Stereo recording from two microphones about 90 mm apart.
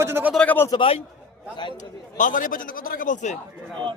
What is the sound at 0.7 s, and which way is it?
Speech, 50° left (ahead or behind).